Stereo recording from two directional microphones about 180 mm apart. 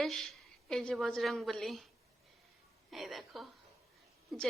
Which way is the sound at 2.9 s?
Centre (ahead or behind).